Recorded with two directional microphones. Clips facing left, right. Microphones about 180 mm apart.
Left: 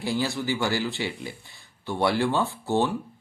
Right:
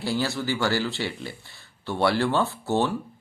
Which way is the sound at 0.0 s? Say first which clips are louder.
Even; 15° left (ahead or behind).